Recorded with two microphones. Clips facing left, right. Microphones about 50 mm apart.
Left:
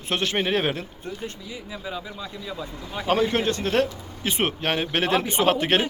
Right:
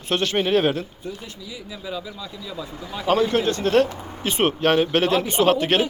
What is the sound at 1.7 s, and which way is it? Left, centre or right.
Speech, left.